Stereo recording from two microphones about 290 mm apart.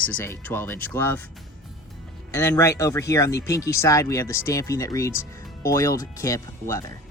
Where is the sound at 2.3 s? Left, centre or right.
Centre.